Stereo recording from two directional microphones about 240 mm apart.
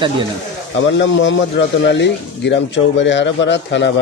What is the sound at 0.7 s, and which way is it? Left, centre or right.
Speech, left.